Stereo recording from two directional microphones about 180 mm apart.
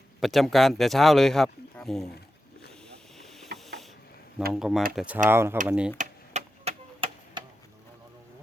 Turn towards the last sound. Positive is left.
turn(degrees=-35)  # may be behind; listen again after turning